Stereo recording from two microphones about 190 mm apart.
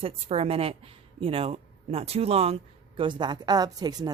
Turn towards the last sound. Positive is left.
turn(degrees=-20)  # may be behind; listen again after turning